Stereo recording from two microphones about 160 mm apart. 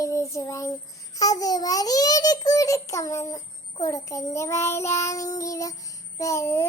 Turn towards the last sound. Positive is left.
turn(degrees=20)  # may be behind; listen again after turning